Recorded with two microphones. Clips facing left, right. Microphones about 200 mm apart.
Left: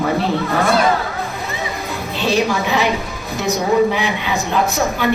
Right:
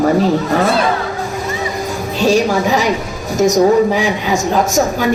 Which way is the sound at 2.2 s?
45° right (ahead or behind).